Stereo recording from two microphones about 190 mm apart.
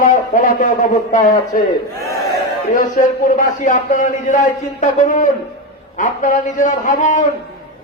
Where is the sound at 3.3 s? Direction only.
40° left (ahead or behind).